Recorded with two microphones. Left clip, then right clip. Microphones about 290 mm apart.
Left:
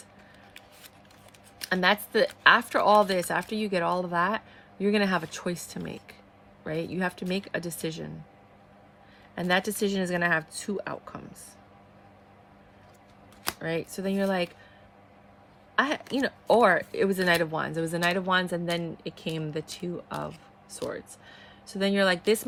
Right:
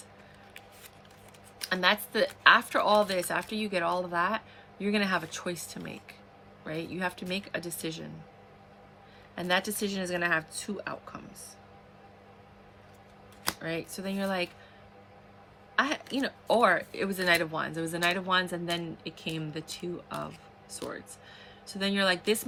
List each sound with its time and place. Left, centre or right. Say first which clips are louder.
1.6 s speech: left 2 dB; left
9.3 s speech: left 2 dB; left
13.6 s speech: left 4 dB; left
15.7 s speech: left 2 dB; left